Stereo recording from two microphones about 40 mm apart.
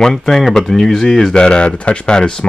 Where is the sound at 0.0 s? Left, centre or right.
Centre.